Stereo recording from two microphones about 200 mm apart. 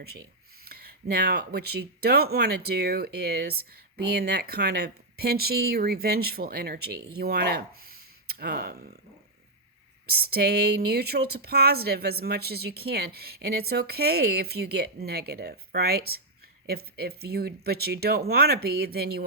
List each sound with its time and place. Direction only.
0.6 s speech: 50° right (ahead or behind)
10.1 s speech: 50° right (ahead or behind)